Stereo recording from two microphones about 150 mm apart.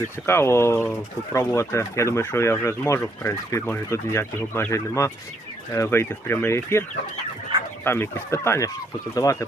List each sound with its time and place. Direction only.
0.3 s speech: 15° left (ahead or behind)
7.9 s speech: 15° left (ahead or behind)